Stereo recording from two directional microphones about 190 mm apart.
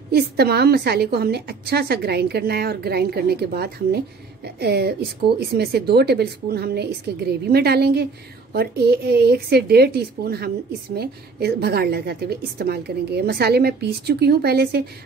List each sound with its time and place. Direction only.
0.1 s a woman's voice: 55° right (ahead or behind)